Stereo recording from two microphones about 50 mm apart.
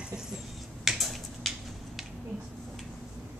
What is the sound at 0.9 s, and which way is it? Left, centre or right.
Finger snapping, centre.